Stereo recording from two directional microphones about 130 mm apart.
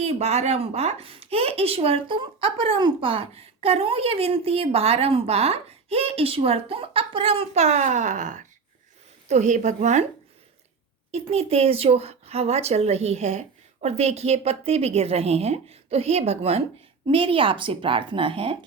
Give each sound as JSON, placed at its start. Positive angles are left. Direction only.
{"t": 0.0, "sound": "speech", "side_deg": -55}
{"t": 11.1, "sound": "speech", "side_deg": -50}